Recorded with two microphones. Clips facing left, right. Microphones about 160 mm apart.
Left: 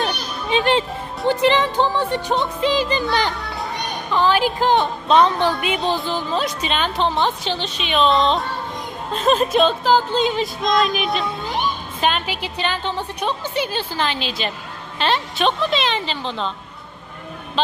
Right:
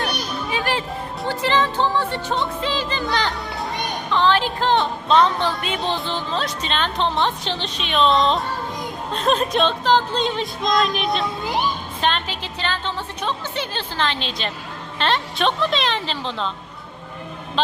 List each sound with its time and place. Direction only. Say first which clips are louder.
0.5 s music: left 7 dB; 25° left (ahead or behind); by 8.4 s centre (ahead or behind)
9.1 s speech: left 3 dB; centre (ahead or behind)
11.9 s music: left 3 dB; 10° left (ahead or behind)
14.9 s speech: left 1 dB; 5° left (ahead or behind)